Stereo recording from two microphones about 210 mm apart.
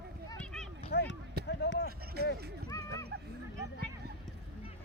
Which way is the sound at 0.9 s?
50° left (ahead or behind).